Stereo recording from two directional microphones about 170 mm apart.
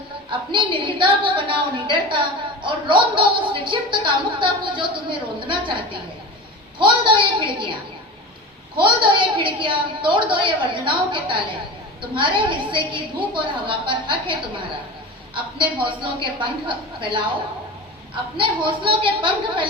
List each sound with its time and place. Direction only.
0.3 s a woman's voice: 30° right (ahead or behind)
15.8 s a woman's voice: 30° right (ahead or behind)
18.3 s a woman's voice: 30° right (ahead or behind)